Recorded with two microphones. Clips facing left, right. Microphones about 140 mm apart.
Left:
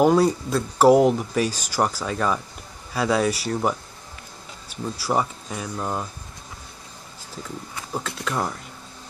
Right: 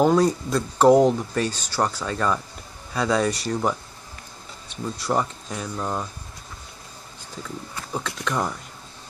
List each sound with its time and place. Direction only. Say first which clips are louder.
0.0 s speech: left 1 dB; 5° left (ahead or behind)
7.7 s speech: even; 5° left (ahead or behind)